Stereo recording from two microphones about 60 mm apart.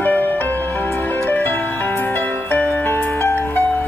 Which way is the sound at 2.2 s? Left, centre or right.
Left.